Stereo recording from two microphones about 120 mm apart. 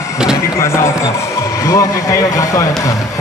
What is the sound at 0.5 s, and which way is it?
Speech, 20° left (ahead or behind).